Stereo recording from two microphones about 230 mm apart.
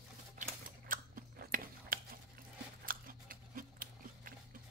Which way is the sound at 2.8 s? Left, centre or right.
Right.